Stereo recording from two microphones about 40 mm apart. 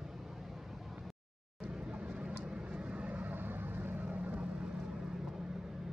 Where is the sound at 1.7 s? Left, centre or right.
Right.